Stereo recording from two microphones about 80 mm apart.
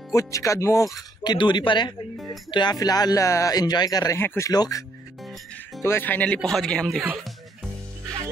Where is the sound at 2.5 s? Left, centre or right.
Left.